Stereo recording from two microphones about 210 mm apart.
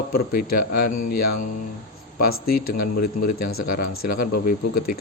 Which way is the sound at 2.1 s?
45° left (ahead or behind).